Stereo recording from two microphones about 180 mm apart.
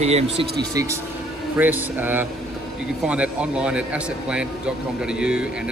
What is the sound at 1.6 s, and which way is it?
Speech, 10° right (ahead or behind).